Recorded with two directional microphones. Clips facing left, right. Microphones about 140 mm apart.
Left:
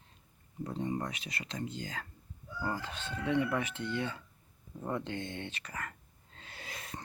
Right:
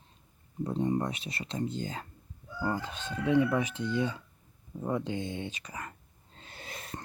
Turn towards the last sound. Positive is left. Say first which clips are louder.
# right 2 dB
turn(degrees=-25)  # may be behind; listen again after turning